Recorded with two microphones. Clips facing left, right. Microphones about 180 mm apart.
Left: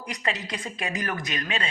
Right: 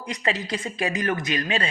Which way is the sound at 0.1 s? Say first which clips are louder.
Right 4 dB; 30° right (ahead or behind).